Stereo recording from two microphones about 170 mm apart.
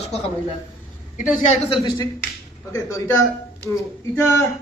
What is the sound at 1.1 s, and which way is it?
Speech, 50° left (ahead or behind).